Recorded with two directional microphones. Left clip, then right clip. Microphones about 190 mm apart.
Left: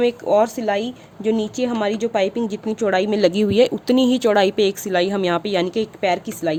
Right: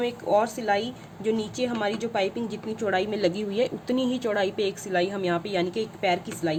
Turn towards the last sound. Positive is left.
turn(degrees=55)  # may be behind; listen again after turning